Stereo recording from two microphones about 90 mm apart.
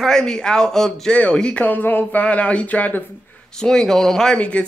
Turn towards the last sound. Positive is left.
turn(degrees=15)  # may be behind; listen again after turning